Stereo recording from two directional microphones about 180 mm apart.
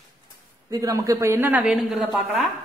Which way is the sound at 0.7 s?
20° right (ahead or behind).